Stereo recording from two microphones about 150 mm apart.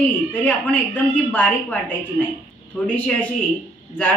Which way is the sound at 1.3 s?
10° left (ahead or behind).